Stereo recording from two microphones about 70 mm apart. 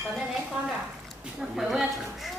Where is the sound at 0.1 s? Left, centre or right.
Centre.